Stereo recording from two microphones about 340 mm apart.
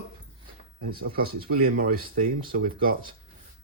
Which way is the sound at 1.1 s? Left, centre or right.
Right.